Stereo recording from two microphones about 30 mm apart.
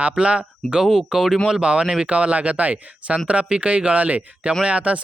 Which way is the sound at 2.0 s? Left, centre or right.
Right.